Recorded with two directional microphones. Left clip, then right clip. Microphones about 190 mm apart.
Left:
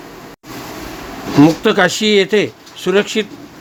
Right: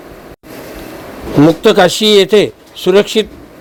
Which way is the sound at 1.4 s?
15° right (ahead or behind).